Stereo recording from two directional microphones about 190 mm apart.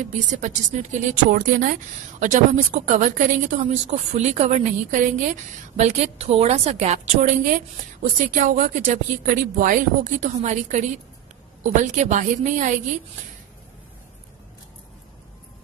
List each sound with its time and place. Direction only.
0.0 s a woman's voice: 40° right (ahead or behind)